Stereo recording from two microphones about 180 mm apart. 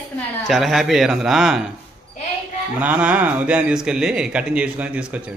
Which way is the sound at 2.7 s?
5° right (ahead or behind).